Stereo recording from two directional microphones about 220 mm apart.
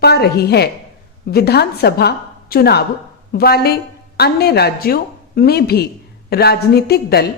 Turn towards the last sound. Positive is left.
turn(degrees=45)  # may be behind; listen again after turning